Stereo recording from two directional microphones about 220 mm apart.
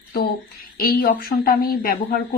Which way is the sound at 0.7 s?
40° left (ahead or behind).